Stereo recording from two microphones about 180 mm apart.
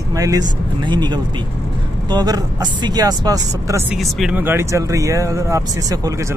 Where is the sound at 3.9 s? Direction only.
Centre (ahead or behind); by 6.1 s 20° right (ahead or behind).